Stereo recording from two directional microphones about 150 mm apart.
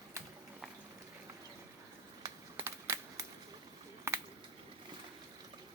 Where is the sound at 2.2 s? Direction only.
20° right (ahead or behind).